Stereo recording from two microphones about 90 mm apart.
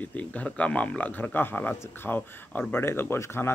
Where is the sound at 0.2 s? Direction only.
15° left (ahead or behind).